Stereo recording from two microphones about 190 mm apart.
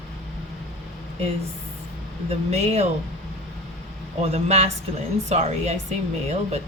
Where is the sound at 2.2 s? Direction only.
35° right (ahead or behind).